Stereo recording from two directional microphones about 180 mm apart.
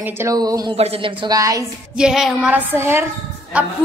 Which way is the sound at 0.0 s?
15° right (ahead or behind).